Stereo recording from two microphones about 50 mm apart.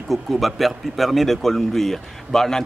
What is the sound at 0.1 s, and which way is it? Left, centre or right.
Speech, centre.